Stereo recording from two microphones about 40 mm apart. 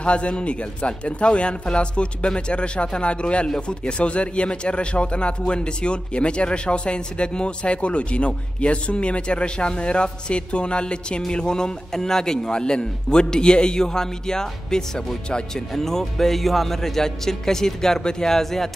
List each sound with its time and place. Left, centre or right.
0.0 s a man's voice: left; by 18.7 s centre